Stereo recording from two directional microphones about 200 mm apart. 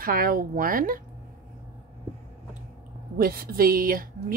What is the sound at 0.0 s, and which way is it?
Speech, 45° right (ahead or behind).